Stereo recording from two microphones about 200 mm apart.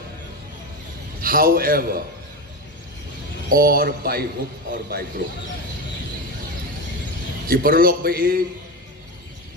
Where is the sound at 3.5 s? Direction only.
45° right (ahead or behind).